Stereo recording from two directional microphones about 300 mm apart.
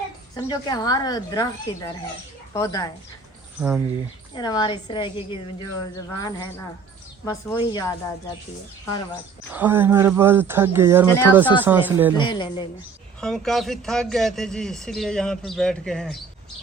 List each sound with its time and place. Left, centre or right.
0.3 s a woman's voice: centre
3.6 s a man's voice: centre
4.4 s a woman's voice: centre
9.5 s a man's voice: centre
12.1 s a woman's voice: centre
13.1 s a man's voice: centre